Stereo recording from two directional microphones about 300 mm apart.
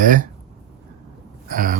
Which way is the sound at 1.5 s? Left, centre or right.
Right.